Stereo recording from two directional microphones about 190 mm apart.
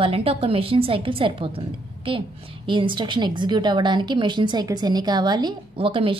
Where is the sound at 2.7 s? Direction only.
25° right (ahead or behind).